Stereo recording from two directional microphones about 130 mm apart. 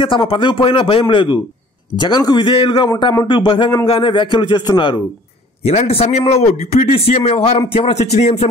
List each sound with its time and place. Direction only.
0.0 s a man's voice: 40° left (ahead or behind)
5.6 s a man's voice: 50° left (ahead or behind)